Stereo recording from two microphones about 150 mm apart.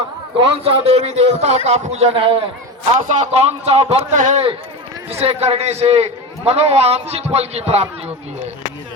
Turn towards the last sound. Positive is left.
turn(degrees=-45)  # may be behind; listen again after turning